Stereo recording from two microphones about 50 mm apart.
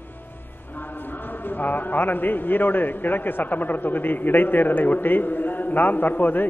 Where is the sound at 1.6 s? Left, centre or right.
Left.